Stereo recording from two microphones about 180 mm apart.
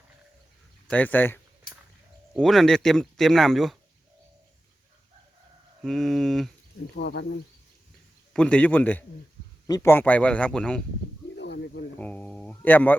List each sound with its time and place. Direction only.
0.9 s speech: 10° left (ahead or behind)
5.8 s speech: centre (ahead or behind)
6.9 s speech: 70° left (ahead or behind)
8.3 s speech: 5° left (ahead or behind)
11.3 s snake: 70° left (ahead or behind)
11.9 s speech: 10° left (ahead or behind)